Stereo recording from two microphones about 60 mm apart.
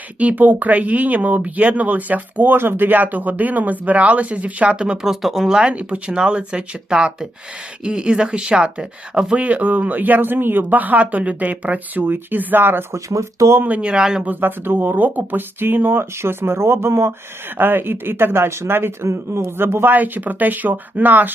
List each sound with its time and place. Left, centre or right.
0.2 s speech: right
5.0 s speech: centre
9.4 s speech: right
12.9 s speech: right
13.7 s speech: right
13.9 s speech: centre
14.3 s speech: right